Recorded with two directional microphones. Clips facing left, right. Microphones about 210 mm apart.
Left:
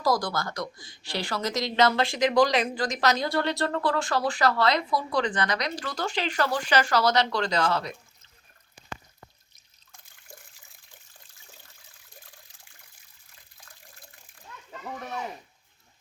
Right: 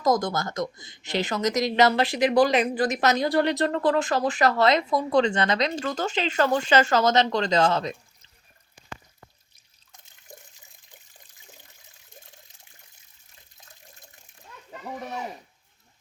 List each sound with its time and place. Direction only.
0.0 s speech: 20° right (ahead or behind)
9.9 s drip: 20° right (ahead or behind)
10.9 s water: 20° right (ahead or behind)
14.7 s a sound: 10° right (ahead or behind)